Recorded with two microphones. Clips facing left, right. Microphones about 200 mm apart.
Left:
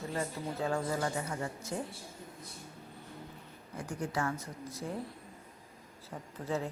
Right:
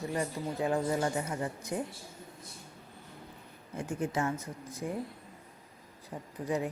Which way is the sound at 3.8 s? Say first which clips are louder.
Right 3 dB; 20° right (ahead or behind).